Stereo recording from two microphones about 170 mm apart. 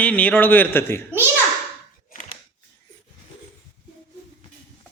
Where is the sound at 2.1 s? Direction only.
45° left (ahead or behind).